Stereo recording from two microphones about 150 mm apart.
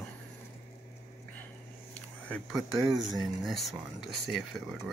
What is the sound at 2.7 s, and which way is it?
Speech, 25° right (ahead or behind).